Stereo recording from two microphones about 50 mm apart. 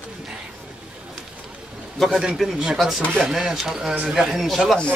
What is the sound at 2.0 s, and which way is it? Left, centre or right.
A man's voice, centre.